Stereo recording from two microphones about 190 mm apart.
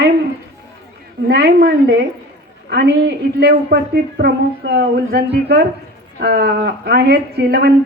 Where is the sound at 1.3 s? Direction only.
60° right (ahead or behind).